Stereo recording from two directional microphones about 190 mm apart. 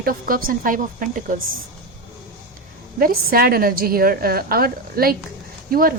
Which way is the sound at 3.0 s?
50° right (ahead or behind).